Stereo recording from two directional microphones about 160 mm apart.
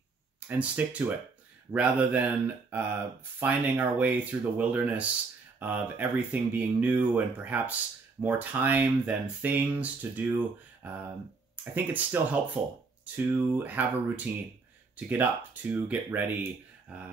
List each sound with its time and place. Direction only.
0.5 s speech: 10° right (ahead or behind)